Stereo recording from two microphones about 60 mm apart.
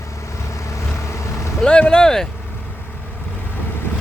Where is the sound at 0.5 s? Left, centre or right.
Left.